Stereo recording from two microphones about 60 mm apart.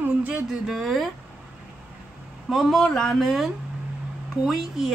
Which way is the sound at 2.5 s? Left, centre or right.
Centre.